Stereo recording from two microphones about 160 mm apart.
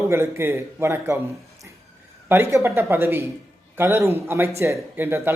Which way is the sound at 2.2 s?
15° right (ahead or behind).